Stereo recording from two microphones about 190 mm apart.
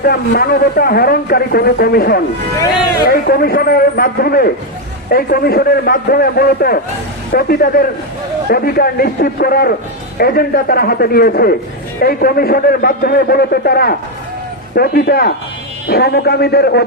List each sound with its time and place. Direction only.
0.0 s a man's voice: 55° left (ahead or behind)